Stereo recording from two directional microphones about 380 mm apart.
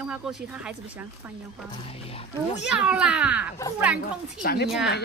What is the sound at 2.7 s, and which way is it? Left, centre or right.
Speech, centre.